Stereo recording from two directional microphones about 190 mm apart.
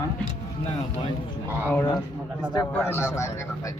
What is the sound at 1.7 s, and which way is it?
A man's voice, 15° left (ahead or behind).